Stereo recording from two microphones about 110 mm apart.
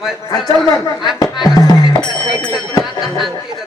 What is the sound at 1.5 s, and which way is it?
Speech, 30° left (ahead or behind).